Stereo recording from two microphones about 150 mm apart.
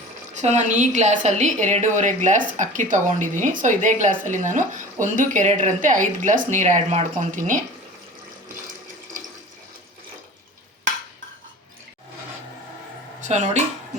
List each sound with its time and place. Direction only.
0.3 s a woman's voice: 50° right (ahead or behind)
13.2 s speech: 50° right (ahead or behind)